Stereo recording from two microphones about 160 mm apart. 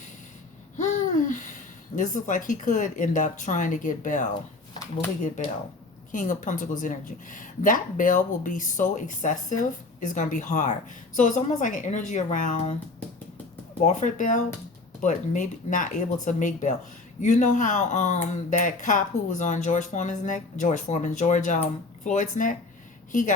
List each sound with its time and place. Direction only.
0.8 s a sound: 50° left (ahead or behind)
2.0 s speech: 50° left (ahead or behind)
6.1 s speech: 55° left (ahead or behind)
13.8 s speech: 50° left (ahead or behind)